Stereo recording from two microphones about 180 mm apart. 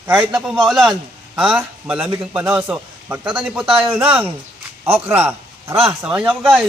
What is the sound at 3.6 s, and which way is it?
Speech, 30° right (ahead or behind).